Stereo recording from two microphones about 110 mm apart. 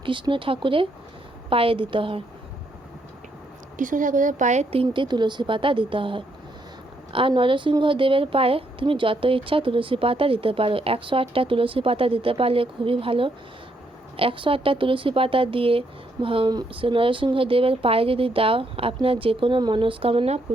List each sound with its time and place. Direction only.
0.0 s a woman's voice: 50° right (ahead or behind)
4.4 s a woman's voice: 75° right (ahead or behind)